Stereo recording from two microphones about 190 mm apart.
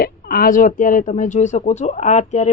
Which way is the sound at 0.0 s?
50° left (ahead or behind).